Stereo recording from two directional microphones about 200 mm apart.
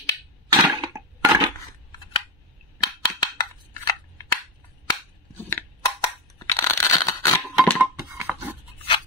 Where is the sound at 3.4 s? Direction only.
20° left (ahead or behind).